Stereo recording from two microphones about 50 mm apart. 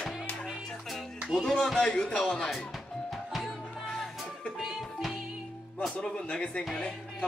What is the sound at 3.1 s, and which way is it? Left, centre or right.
Music, centre.